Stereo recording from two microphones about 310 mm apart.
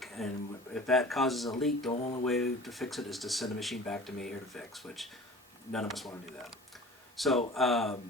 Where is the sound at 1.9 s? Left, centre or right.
Centre.